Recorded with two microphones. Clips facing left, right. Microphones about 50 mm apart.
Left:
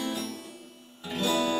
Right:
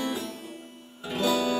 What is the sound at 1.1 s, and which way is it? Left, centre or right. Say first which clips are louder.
Music: right 2 dB; centre.